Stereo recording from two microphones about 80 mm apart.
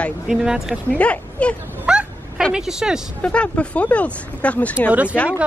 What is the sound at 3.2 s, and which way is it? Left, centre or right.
Speech, centre.